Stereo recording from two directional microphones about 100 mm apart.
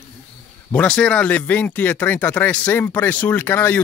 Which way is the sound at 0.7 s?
10° left (ahead or behind).